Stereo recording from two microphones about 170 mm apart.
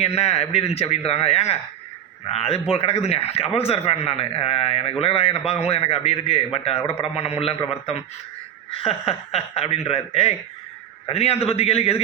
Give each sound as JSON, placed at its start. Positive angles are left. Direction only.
{"t": 0.2, "sound": "a man's voice", "side_deg": 40}